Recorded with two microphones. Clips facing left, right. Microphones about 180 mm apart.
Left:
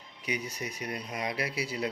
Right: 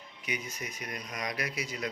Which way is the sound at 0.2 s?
35° left (ahead or behind).